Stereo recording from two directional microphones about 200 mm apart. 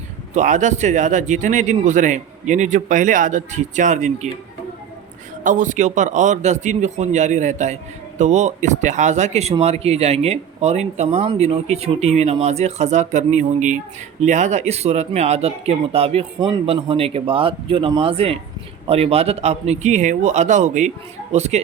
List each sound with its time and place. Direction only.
0.3 s speech: 35° right (ahead or behind)
5.4 s speech: 40° right (ahead or behind)